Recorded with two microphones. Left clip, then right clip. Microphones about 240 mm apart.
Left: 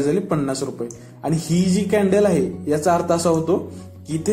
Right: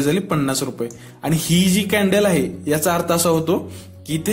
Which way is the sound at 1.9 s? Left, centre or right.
Right.